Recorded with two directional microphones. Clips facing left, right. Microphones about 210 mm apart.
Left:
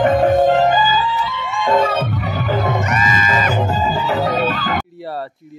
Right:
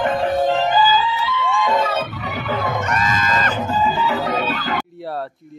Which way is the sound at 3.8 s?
40° left (ahead or behind).